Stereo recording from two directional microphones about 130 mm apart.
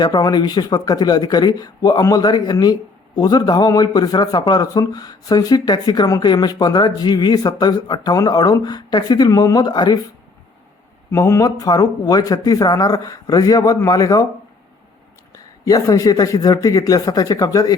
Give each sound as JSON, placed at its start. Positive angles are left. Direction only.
{"t": 0.0, "sound": "a man's voice", "side_deg": 30}
{"t": 11.1, "sound": "speech", "side_deg": 25}
{"t": 15.3, "sound": "speech", "side_deg": 30}